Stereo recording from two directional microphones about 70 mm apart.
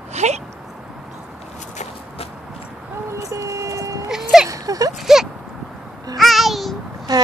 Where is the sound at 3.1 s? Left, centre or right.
Right.